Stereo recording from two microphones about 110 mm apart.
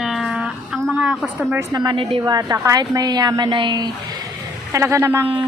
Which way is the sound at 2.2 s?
35° right (ahead or behind).